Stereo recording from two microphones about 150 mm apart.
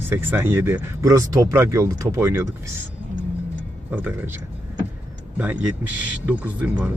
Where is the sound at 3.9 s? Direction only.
10° right (ahead or behind).